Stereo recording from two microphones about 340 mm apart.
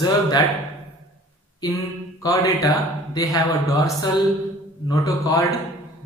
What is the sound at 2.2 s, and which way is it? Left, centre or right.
A man's voice, centre.